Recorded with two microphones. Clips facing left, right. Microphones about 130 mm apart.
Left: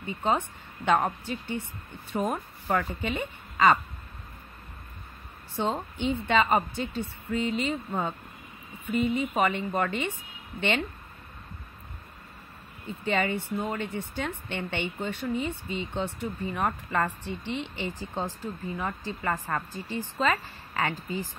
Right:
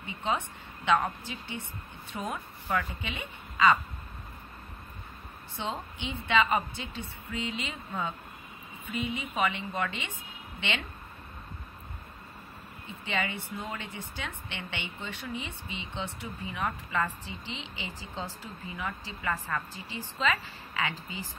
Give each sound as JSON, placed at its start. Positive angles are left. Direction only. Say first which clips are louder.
{"t": 0.0, "sound": "speech", "louder": "left 4 dB", "side_deg": 45}
{"t": 5.6, "sound": "speech", "louder": "left 7 dB", "side_deg": 45}
{"t": 12.8, "sound": "speech", "louder": "left 6 dB", "side_deg": 45}